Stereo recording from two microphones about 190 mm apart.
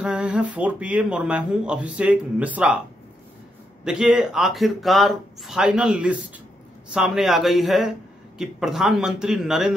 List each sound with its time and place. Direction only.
0.0 s speech: 5° right (ahead or behind)
3.8 s speech: 5° right (ahead or behind)